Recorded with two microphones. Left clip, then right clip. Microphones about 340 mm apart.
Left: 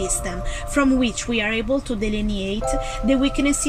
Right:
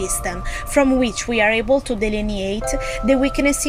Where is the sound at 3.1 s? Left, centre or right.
Centre.